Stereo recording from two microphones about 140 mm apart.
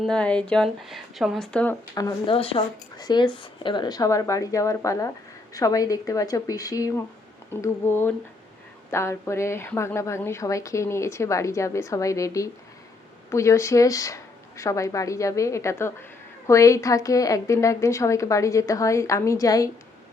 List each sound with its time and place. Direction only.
0.0 s speech: 5° left (ahead or behind)
2.0 s a woman's voice: 25° left (ahead or behind)
2.3 s speech: 40° left (ahead or behind)
3.0 s a woman's voice: 30° left (ahead or behind)